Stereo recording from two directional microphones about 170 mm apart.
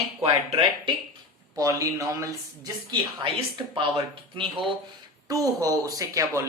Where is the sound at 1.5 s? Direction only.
20° right (ahead or behind).